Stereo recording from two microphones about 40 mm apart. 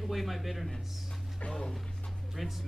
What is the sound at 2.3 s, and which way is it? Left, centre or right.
Speech, centre.